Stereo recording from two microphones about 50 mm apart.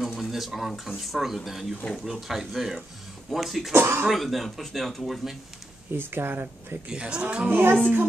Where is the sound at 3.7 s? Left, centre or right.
Right.